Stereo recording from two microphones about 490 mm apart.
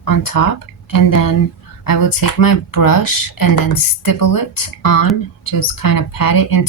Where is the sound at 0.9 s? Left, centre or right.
Left.